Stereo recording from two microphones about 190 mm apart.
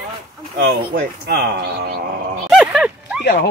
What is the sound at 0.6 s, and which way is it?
Speech, 55° right (ahead or behind).